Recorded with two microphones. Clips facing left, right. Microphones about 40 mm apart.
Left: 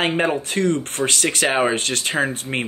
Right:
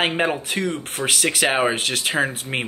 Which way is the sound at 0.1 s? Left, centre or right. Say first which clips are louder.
Left 2 dB; centre.